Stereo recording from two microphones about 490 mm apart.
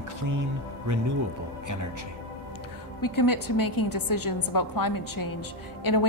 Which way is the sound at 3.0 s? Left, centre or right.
Left.